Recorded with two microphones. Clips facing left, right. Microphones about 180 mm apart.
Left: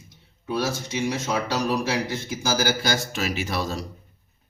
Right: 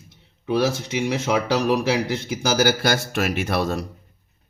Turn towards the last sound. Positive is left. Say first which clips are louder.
# right 5 dB
turn(degrees=-60)  # may be behind; listen again after turning